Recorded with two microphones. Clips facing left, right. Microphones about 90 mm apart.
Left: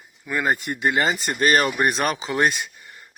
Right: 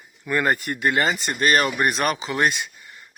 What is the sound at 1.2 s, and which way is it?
Speech, 40° left (ahead or behind).